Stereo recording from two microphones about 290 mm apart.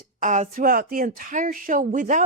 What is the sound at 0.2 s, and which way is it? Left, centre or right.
Speech, right.